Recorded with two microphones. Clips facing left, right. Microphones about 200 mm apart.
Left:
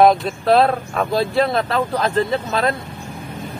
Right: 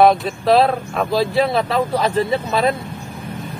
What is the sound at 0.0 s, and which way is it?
Speech, centre (ahead or behind).